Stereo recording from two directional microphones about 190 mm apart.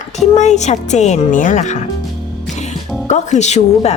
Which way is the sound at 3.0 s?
35° left (ahead or behind).